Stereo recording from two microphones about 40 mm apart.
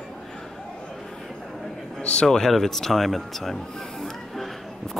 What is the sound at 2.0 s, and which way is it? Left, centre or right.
Speech, left.